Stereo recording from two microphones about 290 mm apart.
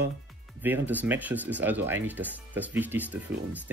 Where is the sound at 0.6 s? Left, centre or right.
Centre.